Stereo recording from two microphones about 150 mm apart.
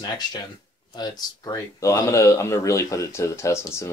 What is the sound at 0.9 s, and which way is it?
Speech, 25° left (ahead or behind).